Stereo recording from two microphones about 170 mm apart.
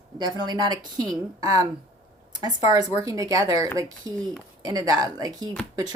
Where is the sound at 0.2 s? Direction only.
25° right (ahead or behind).